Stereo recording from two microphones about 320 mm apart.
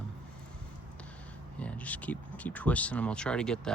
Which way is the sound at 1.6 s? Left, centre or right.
Centre.